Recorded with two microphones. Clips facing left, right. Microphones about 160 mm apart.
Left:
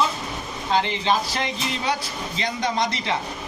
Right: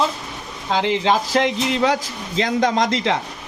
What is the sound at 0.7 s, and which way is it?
Speech, 90° right.